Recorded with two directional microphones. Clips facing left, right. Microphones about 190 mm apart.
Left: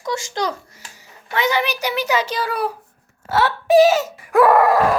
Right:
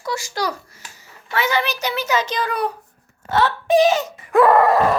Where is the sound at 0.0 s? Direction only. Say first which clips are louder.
Left 1 dB; 25° left (ahead or behind); by 2.7 s 5° left (ahead or behind).